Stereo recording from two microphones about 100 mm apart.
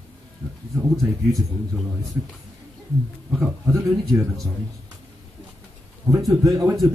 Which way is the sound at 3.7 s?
30° right (ahead or behind).